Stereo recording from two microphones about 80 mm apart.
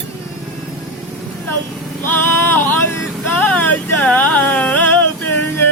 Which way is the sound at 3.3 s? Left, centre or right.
Centre.